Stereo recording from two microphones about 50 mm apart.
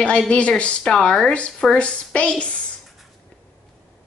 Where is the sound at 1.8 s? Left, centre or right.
Left.